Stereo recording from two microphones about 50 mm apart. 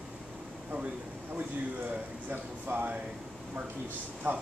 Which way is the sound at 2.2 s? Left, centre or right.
Right.